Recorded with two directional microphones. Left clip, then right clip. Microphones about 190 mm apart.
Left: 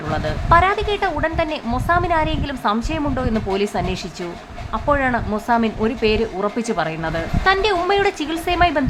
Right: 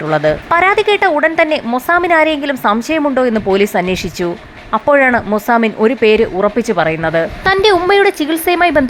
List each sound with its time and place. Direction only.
0.1 s speech: 30° right (ahead or behind)